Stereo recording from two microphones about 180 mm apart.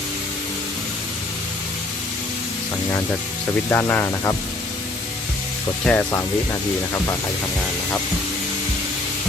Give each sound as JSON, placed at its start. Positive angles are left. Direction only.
{"t": 3.7, "sound": "speech", "side_deg": 10}
{"t": 5.8, "sound": "speech", "side_deg": 10}